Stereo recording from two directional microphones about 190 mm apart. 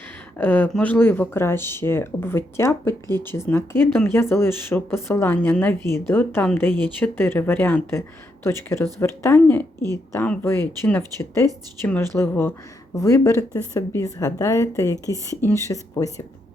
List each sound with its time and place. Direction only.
0.3 s speech: 10° left (ahead or behind)
15.0 s speech: 15° right (ahead or behind)
15.4 s speech: 15° left (ahead or behind)